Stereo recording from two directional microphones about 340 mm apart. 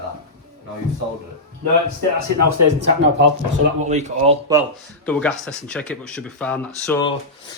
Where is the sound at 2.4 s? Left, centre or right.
Right.